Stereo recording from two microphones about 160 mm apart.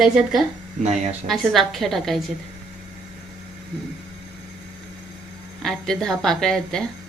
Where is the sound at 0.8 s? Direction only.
45° right (ahead or behind).